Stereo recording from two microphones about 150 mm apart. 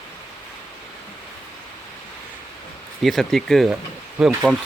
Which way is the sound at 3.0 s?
Centre (ahead or behind).